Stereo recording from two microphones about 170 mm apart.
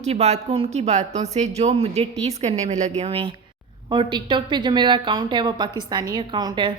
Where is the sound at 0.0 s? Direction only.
40° right (ahead or behind).